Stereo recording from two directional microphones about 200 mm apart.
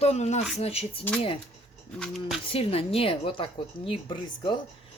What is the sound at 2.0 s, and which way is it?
Speech, centre (ahead or behind).